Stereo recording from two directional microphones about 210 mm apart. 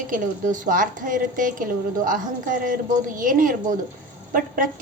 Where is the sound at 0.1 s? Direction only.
40° right (ahead or behind).